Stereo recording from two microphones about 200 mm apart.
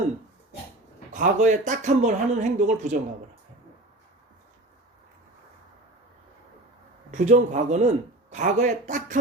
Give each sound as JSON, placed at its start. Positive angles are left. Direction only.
{"t": 1.1, "sound": "a man's voice", "side_deg": -40}
{"t": 7.1, "sound": "a man's voice", "side_deg": -35}